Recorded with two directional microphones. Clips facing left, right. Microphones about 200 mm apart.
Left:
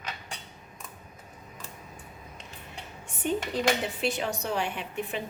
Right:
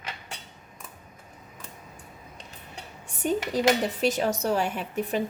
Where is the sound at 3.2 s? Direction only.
40° right (ahead or behind).